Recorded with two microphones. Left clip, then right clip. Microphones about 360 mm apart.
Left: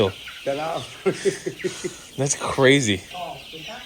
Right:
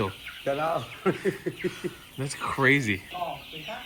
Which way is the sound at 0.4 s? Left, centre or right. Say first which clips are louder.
Left 1 dB; right.